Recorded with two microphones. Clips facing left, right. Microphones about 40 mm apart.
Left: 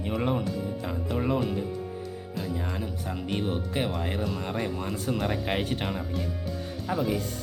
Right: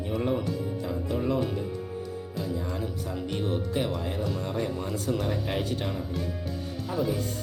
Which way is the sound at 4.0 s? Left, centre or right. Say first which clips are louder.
Left 1 dB; left.